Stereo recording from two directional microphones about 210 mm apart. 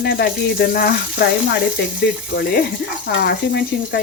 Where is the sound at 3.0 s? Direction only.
55° left (ahead or behind).